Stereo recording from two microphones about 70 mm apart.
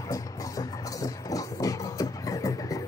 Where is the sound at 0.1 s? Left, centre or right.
Left.